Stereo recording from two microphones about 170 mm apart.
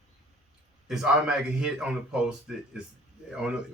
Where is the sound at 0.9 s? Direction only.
5° right (ahead or behind).